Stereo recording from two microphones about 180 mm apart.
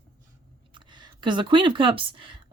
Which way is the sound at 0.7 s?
25° right (ahead or behind).